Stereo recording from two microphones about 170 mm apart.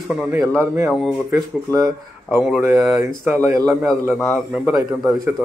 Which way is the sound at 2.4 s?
5° right (ahead or behind).